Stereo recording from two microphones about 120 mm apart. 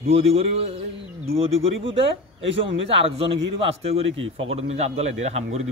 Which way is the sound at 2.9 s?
55° right (ahead or behind).